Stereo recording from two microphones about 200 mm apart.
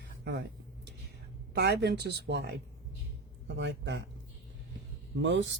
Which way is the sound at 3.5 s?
65° right (ahead or behind).